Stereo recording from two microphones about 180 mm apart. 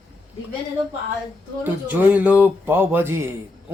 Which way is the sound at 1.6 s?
10° right (ahead or behind).